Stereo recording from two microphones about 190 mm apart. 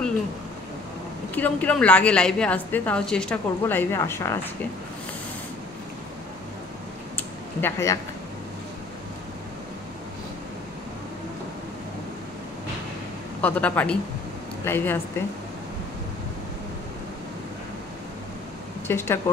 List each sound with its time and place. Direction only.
1.3 s a woman's voice: 10° left (ahead or behind)
7.6 s a woman's voice: 15° left (ahead or behind)
13.4 s a woman's voice: 5° left (ahead or behind)
18.9 s a woman's voice: 15° left (ahead or behind)